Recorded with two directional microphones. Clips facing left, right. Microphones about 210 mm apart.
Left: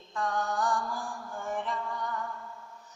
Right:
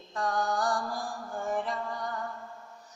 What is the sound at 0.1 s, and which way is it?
Mantra, 35° right (ahead or behind).